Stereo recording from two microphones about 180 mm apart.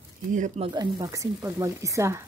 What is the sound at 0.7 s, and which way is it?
Speech, 20° right (ahead or behind).